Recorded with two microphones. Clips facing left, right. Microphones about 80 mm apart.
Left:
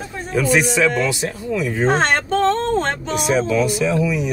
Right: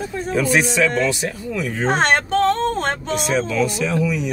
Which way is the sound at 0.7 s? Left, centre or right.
Centre.